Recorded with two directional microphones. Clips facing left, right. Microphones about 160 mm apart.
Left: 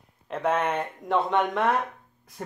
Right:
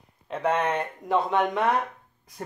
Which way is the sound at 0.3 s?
5° left (ahead or behind).